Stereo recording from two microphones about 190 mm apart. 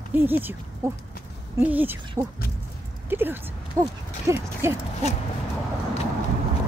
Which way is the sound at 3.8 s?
15° right (ahead or behind).